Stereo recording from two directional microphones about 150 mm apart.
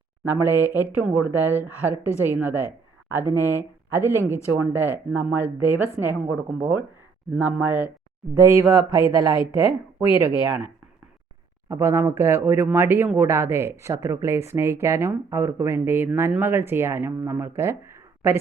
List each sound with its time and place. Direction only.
0.5 s a woman's voice: 15° right (ahead or behind)
11.7 s a woman's voice: 15° right (ahead or behind)